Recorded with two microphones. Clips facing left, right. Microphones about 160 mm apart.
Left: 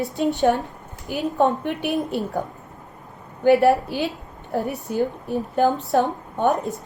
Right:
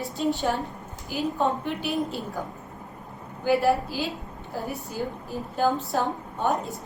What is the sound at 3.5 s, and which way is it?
A woman's voice, 65° left (ahead or behind).